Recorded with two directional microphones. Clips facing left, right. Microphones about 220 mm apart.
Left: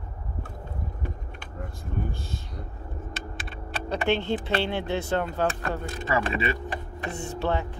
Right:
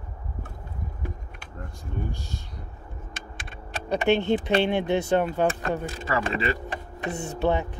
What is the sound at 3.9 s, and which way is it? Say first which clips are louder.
Speech: right 4 dB; 15° right (ahead or behind).